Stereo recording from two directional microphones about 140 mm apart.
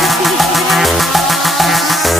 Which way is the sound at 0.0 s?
Centre (ahead or behind).